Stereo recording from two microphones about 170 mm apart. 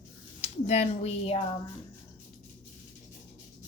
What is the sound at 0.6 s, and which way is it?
Speech, 40° left (ahead or behind).